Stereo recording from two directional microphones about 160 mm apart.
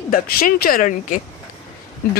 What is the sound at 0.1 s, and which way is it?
Speech, 60° left (ahead or behind).